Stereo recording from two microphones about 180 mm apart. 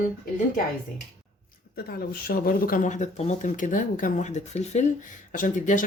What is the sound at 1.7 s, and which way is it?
Speech, 55° left (ahead or behind).